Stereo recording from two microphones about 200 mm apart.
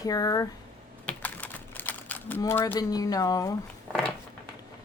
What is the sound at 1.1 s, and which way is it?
Typing, 10° left (ahead or behind).